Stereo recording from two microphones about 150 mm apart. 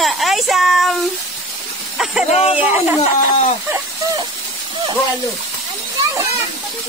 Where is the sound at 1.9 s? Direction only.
5° right (ahead or behind).